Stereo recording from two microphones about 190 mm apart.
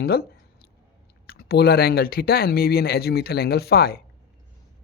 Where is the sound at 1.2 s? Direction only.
55° left (ahead or behind).